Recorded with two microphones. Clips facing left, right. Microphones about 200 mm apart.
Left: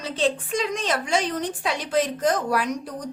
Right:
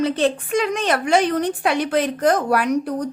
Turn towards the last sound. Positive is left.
turn(degrees=-60)  # may be behind; listen again after turning